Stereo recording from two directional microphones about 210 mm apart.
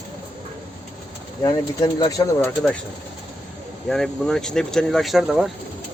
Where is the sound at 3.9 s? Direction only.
5° left (ahead or behind).